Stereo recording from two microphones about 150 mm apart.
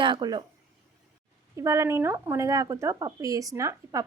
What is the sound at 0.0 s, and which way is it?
Speech, 30° right (ahead or behind).